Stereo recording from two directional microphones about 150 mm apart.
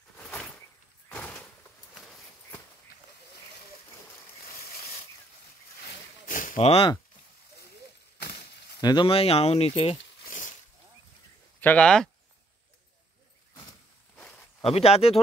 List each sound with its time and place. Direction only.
0.2 s a sound: 5° left (ahead or behind)
5.8 s a sound: 60° left (ahead or behind)
6.6 s speech: 45° left (ahead or behind)
8.4 s speech: 30° left (ahead or behind)
11.6 s speech: 10° left (ahead or behind)
14.1 s zipper: 10° left (ahead or behind)
14.6 s speech: 40° left (ahead or behind)